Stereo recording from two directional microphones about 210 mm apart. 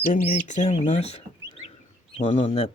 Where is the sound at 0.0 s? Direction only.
35° left (ahead or behind).